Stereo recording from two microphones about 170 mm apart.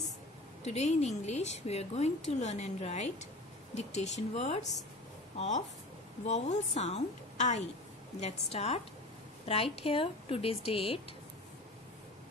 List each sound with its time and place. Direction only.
0.7 s a woman's voice: 40° left (ahead or behind)
6.2 s a woman's voice: 40° left (ahead or behind)